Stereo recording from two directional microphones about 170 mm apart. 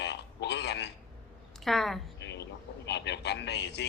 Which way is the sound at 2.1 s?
90° left.